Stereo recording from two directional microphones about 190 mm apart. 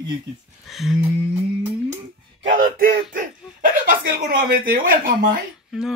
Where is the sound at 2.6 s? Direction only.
45° right (ahead or behind).